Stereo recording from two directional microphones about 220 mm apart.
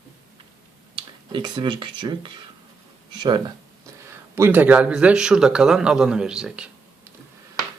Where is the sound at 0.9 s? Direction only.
20° right (ahead or behind); by 6.6 s 5° right (ahead or behind).